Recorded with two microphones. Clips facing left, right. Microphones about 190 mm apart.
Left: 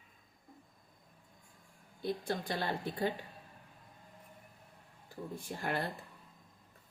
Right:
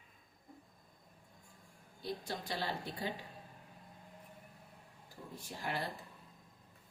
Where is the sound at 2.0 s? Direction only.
55° left (ahead or behind).